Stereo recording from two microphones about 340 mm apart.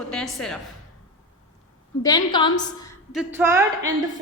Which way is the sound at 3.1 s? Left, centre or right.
Centre.